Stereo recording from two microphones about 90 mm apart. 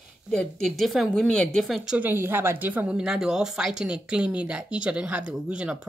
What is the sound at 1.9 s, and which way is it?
Speech, 20° right (ahead or behind).